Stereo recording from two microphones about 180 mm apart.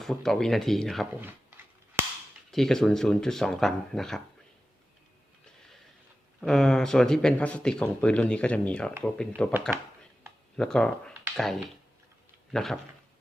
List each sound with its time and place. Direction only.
0.0 s speech: centre (ahead or behind)
2.5 s speech: centre (ahead or behind)
6.4 s speech: 5° left (ahead or behind)
9.3 s speech: 10° right (ahead or behind)
10.6 s speech: 5° left (ahead or behind)